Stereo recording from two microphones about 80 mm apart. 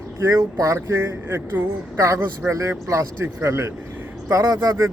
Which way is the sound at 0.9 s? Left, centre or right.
Right.